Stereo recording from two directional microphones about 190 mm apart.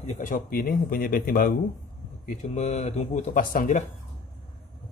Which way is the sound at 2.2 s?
40° left (ahead or behind).